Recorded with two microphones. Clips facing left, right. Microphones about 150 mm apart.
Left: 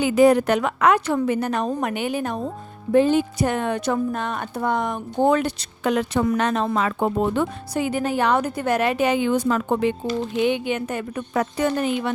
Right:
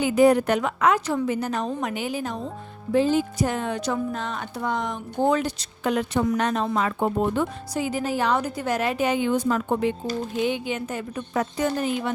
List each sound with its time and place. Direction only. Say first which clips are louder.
0.0 s speech: left 2 dB; 90° left
10.3 s speech: left 4 dB; 65° left (ahead or behind)